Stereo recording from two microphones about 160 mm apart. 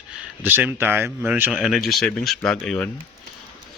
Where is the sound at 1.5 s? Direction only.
Centre (ahead or behind).